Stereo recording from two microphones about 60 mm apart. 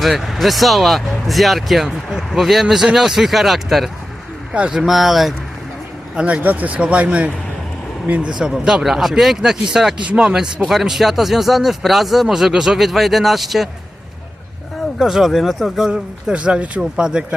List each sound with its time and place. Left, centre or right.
0.0 s speech: centre
4.5 s speech: centre
4.8 s speech: centre
6.1 s speech: right
8.3 s speech: centre
14.9 s speech: centre
15.9 s speech: centre